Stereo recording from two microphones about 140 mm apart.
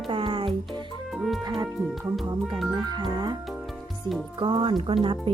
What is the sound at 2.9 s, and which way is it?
Speech, 30° right (ahead or behind).